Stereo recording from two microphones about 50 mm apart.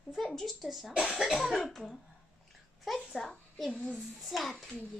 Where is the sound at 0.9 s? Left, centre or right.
Centre.